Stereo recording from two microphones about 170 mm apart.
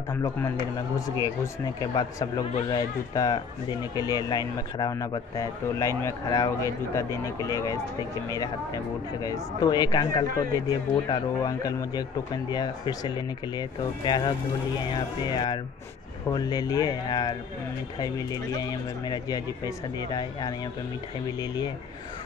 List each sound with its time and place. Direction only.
0.1 s speech: 15° left (ahead or behind)
9.2 s speech: 20° left (ahead or behind)
16.3 s speech: 20° left (ahead or behind)